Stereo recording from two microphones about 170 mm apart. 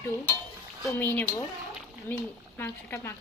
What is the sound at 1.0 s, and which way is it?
Speech, 10° left (ahead or behind).